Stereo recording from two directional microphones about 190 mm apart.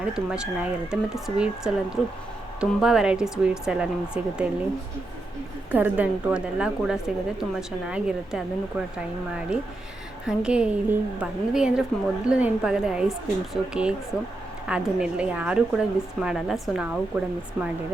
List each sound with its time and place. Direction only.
0.0 s a woman's voice: 5° right (ahead or behind)
5.7 s a woman's voice: 10° right (ahead or behind)